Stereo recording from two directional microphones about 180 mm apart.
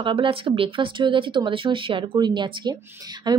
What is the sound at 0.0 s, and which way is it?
A woman's voice, 30° right (ahead or behind).